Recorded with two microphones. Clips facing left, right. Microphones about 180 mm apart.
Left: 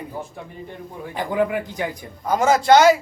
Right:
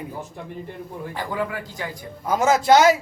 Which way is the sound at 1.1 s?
20° left (ahead or behind).